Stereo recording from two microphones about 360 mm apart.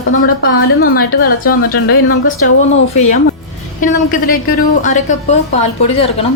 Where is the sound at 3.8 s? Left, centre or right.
Left.